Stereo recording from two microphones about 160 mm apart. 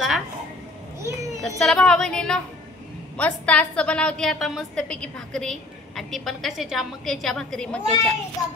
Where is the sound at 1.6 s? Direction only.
5° left (ahead or behind).